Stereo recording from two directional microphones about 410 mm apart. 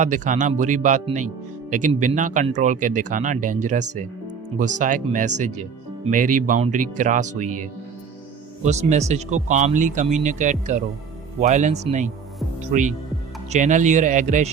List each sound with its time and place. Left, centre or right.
0.0 s speech: centre